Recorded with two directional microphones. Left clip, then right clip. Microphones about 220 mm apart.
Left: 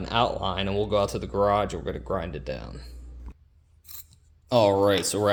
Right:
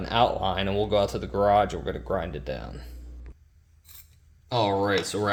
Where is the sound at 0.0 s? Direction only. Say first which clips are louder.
Right 2 dB; centre (ahead or behind).